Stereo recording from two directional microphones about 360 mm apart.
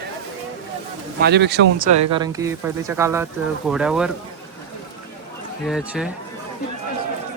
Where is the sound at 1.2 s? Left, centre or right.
Right.